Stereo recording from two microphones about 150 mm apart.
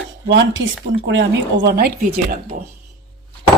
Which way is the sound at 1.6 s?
90° right.